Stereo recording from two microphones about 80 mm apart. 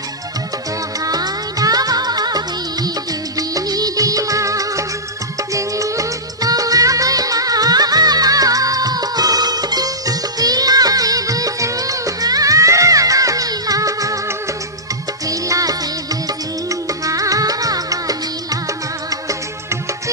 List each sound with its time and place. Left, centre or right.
1.0 s music: right
2.8 s music of bollywood: right
5.5 s music: right